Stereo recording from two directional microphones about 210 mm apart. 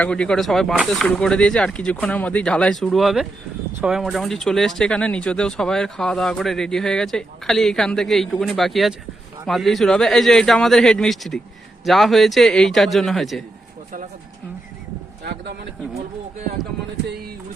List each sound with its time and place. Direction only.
0.0 s speech: 5° left (ahead or behind)
15.2 s speech: 50° right (ahead or behind)